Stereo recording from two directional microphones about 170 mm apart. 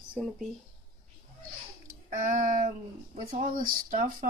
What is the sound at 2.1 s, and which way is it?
Speech, 50° right (ahead or behind).